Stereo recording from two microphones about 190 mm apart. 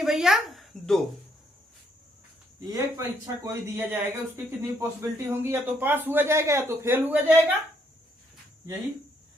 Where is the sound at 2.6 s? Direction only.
15° right (ahead or behind).